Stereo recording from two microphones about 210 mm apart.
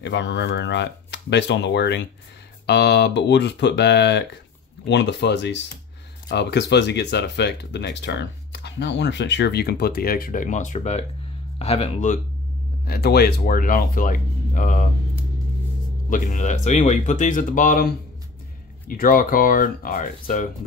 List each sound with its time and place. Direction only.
0.0 s speech: 55° left (ahead or behind); by 12.2 s 35° left (ahead or behind)
12.8 s speech: 45° left (ahead or behind)
16.1 s speech: 35° left (ahead or behind)